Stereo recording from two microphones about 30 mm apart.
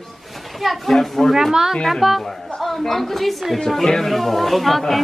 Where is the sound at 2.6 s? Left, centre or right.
Centre.